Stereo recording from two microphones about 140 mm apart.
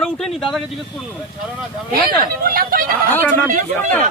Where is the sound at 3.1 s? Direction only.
15° left (ahead or behind).